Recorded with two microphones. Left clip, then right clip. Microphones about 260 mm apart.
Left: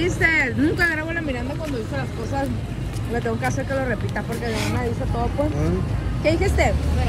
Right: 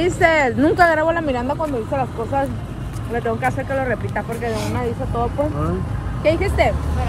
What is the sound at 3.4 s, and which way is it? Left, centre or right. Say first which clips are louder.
Speech: right 4 dB; centre.